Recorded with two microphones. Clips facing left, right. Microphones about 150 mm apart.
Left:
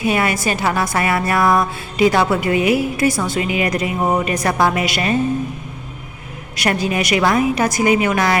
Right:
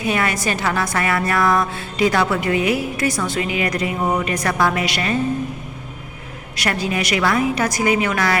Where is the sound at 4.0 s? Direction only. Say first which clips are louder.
Left 3 dB; 25° left (ahead or behind).